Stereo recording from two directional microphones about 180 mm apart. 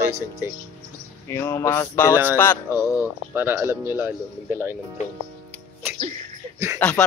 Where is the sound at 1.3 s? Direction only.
15° left (ahead or behind).